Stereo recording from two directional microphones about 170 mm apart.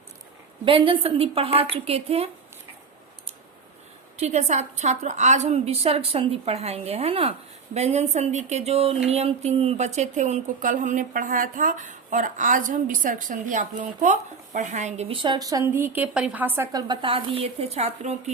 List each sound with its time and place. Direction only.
0.6 s a woman's voice: 30° right (ahead or behind)
4.2 s a woman's voice: 40° right (ahead or behind); by 16.6 s 10° right (ahead or behind)
16.7 s a woman's voice: 30° right (ahead or behind)